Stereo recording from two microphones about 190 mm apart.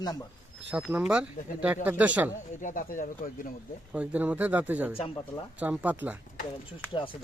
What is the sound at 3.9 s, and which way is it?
Speech, 5° right (ahead or behind).